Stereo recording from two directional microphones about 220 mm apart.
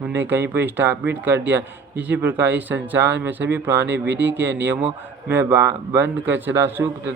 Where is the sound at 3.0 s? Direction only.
50° right (ahead or behind).